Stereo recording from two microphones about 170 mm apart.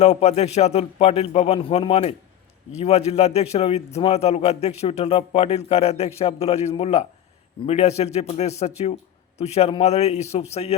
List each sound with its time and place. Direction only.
0.0 s a man's voice: 40° left (ahead or behind)